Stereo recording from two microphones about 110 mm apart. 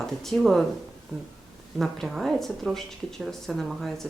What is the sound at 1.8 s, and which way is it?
A woman's voice, centre (ahead or behind).